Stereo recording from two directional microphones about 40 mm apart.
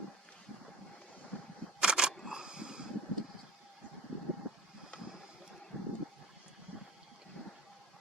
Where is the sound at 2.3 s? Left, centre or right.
Centre.